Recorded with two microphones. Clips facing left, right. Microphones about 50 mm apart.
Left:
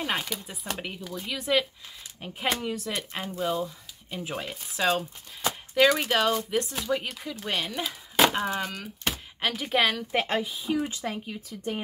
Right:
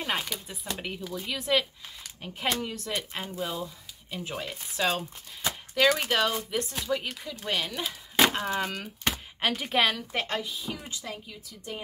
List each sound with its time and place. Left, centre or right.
0.0 s speech: centre
6.0 s speech: centre
10.1 s a woman's voice: centre
10.9 s speech: left